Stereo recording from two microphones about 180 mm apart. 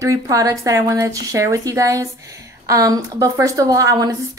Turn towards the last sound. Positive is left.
turn(degrees=-20)  # may be behind; listen again after turning